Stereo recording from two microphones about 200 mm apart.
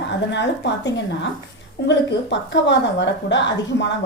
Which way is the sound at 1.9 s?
60° left (ahead or behind).